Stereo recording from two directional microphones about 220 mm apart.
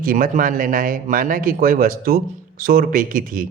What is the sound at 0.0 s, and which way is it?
A man's voice, 40° right (ahead or behind).